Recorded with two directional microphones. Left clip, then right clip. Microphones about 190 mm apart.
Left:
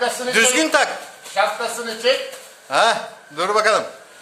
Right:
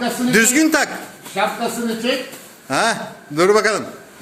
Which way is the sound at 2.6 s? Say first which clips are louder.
Left 2 dB; 10° right (ahead or behind).